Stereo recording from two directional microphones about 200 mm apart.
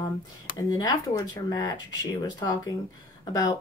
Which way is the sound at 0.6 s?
20° left (ahead or behind).